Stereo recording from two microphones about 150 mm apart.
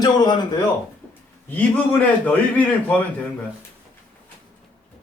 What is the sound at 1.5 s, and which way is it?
A man's voice, 10° left (ahead or behind).